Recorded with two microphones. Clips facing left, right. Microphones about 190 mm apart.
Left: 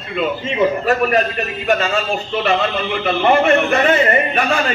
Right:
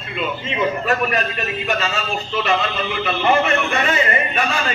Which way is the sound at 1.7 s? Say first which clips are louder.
Left 7 dB; 50° left (ahead or behind).